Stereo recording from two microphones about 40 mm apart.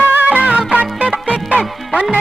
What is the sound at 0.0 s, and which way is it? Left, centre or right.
Music, right.